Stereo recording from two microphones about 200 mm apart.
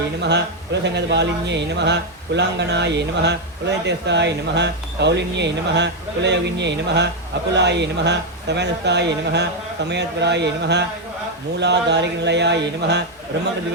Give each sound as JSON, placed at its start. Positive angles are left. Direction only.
{"t": 0.2, "sound": "speech", "side_deg": -60}